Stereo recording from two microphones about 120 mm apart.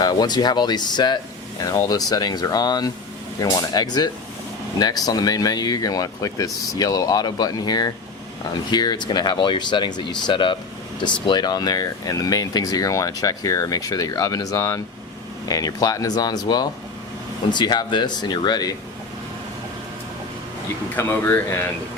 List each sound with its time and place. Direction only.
0.0 s speech: 35° left (ahead or behind)
20.9 s speech: 20° left (ahead or behind)